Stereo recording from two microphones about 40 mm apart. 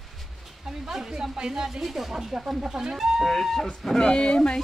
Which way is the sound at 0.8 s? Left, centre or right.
Centre.